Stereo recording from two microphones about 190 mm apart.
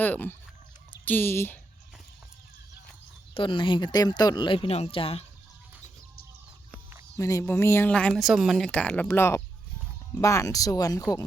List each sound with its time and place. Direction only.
0.0 s speech: 10° left (ahead or behind)
3.3 s speech: 25° left (ahead or behind)
7.2 s speech: 15° left (ahead or behind)